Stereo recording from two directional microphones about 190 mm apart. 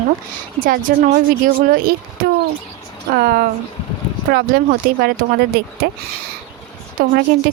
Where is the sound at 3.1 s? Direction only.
50° right (ahead or behind).